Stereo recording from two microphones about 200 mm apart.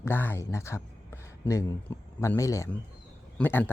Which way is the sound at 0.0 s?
10° left (ahead or behind).